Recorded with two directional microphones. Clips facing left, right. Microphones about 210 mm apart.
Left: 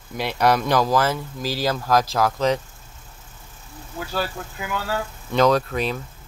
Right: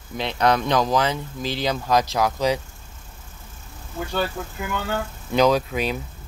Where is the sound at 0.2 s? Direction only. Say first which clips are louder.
Left 1 dB; 5° left (ahead or behind).